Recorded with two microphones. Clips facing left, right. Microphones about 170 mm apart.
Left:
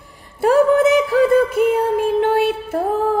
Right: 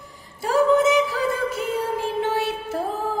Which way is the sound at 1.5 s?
55° left (ahead or behind).